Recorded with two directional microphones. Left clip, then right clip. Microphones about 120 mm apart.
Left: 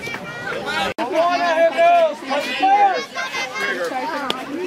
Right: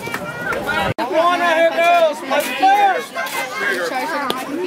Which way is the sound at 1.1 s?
45° right (ahead or behind).